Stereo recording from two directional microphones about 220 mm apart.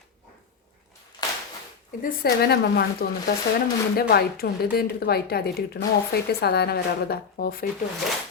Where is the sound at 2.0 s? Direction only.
40° left (ahead or behind).